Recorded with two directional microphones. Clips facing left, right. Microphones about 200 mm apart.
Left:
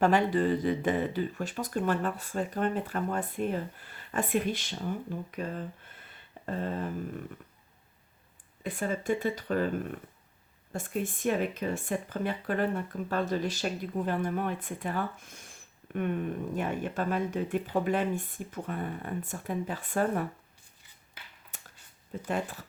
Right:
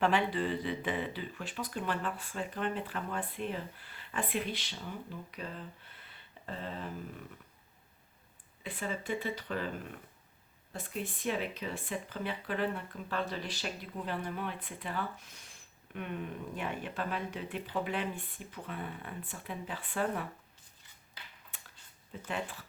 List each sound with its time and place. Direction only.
0.0 s speech: 45° left (ahead or behind)
8.6 s speech: 45° left (ahead or behind)
21.5 s a sound: 45° left (ahead or behind)
22.1 s speech: 45° left (ahead or behind)